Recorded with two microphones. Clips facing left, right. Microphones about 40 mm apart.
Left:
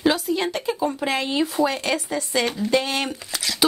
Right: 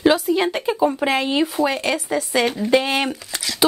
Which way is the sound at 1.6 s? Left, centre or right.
Centre.